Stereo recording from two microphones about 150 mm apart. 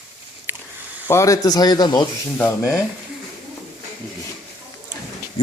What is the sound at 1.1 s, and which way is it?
Speech, 20° left (ahead or behind).